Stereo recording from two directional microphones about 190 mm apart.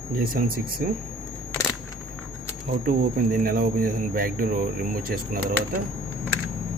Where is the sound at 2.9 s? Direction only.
45° right (ahead or behind).